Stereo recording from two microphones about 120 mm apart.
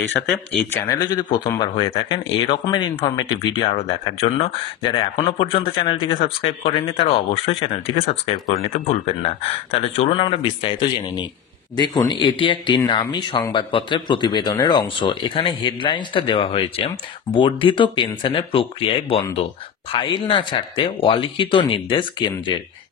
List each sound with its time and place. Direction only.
0.3 s speech: 10° left (ahead or behind)
1.1 s speech: 35° left (ahead or behind)
2.0 s speech: 50° left (ahead or behind)
10.1 s speech: 45° left (ahead or behind)